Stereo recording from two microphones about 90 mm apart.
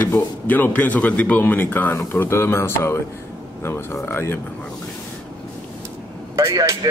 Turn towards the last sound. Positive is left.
turn(degrees=-40)  # may be behind; listen again after turning